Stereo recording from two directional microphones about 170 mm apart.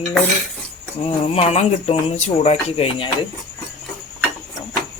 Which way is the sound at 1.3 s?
35° left (ahead or behind).